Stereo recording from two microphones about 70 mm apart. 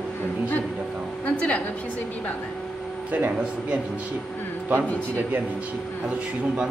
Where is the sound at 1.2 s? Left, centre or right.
Centre.